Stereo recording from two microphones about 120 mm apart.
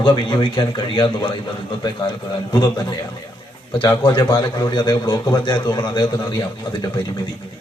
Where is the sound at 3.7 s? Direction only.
40° left (ahead or behind).